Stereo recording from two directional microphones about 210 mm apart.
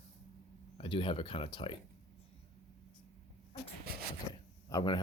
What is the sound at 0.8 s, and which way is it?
Speech, 25° left (ahead or behind).